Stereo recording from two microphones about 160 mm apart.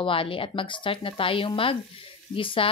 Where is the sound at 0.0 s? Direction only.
35° left (ahead or behind).